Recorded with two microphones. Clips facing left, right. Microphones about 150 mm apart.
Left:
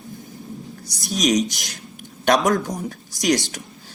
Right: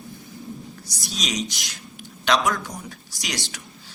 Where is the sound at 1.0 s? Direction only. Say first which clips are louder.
Left 10 dB; 50° left (ahead or behind).